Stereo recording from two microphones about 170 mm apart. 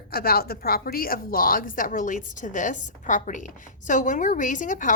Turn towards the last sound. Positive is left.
turn(degrees=50)  # may be behind; listen again after turning